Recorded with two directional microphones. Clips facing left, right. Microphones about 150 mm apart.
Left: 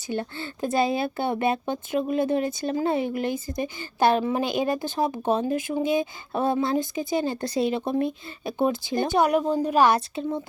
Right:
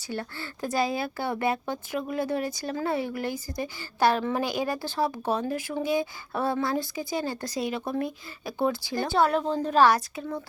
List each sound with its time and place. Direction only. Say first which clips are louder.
0.1 s speech: left 4 dB; 20° left (ahead or behind)
9.9 s speech: left 3 dB; 25° left (ahead or behind)